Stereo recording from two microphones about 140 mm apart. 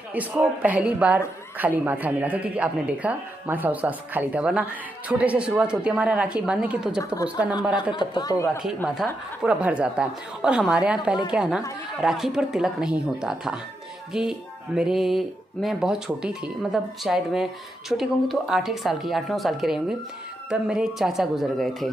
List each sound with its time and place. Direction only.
0.1 s speech: 10° right (ahead or behind)
8.0 s speech: 30° left (ahead or behind)
8.8 s speech: centre (ahead or behind)